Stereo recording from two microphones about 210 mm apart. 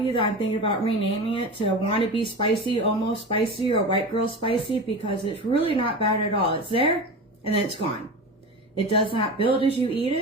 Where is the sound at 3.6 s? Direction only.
25° left (ahead or behind).